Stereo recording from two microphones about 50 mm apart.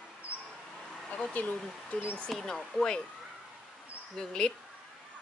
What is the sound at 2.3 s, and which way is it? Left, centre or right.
Speech, centre.